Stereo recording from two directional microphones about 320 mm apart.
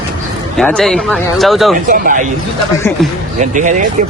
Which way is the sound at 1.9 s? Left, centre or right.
Right.